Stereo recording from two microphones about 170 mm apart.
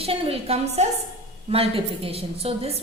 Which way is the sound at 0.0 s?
35° right (ahead or behind).